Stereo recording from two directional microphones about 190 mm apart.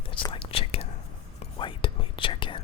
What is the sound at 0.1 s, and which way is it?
Whispering, 25° left (ahead or behind).